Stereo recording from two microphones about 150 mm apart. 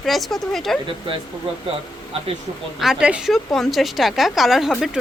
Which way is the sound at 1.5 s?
40° right (ahead or behind).